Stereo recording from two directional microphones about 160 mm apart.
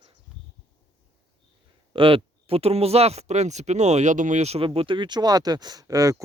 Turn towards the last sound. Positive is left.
turn(degrees=-20)  # may be behind; listen again after turning